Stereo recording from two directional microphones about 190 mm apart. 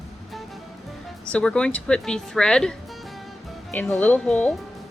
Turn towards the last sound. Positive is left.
turn(degrees=5)  # may be behind; listen again after turning